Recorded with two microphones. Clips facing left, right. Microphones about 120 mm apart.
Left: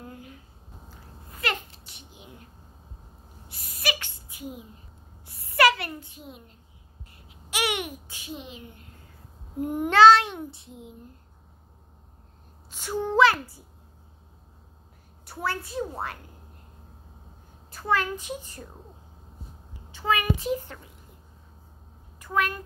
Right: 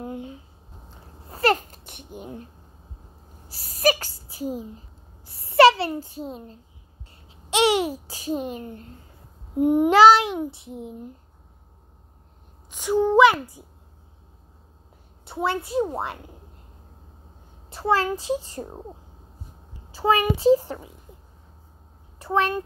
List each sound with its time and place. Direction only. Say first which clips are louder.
0.0 s a sound: right 9 dB; 25° right (ahead or behind)
0.8 s babbling: right 4 dB; 35° right (ahead or behind); by 2.3 s 50° right (ahead or behind)
3.4 s a sound: right 10 dB; 35° right (ahead or behind)
7.2 s a child's voice: right 9 dB; 25° right (ahead or behind)
9.6 s child singing: right 3 dB; 15° right (ahead or behind)
10.7 s a woman's voice: right 8 dB; 25° right (ahead or behind)
12.6 s a woman's voice: right 8 dB; 15° right (ahead or behind)
15.2 s a woman's voice: right 5 dB; 25° right (ahead or behind)
17.6 s a child's voice: right 4 dB; 30° right (ahead or behind)
19.9 s a child's voice: right 5 dB; 35° right (ahead or behind)
22.2 s a child's voice: right 5 dB; 30° right (ahead or behind)